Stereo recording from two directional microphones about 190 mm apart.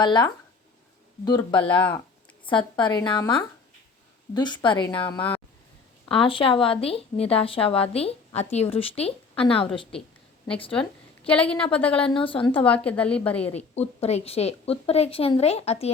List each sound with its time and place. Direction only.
0.0 s speech: 25° left (ahead or behind)
6.1 s a woman's voice: 30° left (ahead or behind)
10.8 s a woman's voice: 5° left (ahead or behind)
12.1 s speech: 25° left (ahead or behind)
12.5 s a woman's voice: 5° left (ahead or behind)
13.5 s a woman's voice: 35° left (ahead or behind)